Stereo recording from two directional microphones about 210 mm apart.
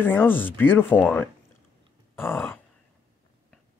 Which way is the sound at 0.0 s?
10° left (ahead or behind).